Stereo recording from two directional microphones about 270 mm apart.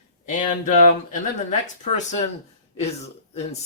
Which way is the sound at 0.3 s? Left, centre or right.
Left.